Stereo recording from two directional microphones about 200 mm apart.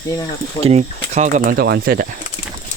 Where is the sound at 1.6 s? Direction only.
50° right (ahead or behind).